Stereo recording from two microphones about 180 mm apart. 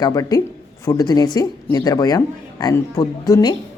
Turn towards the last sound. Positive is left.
turn(degrees=20)  # may be behind; listen again after turning